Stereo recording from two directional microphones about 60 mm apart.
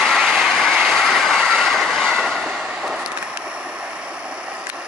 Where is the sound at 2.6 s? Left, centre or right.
Centre.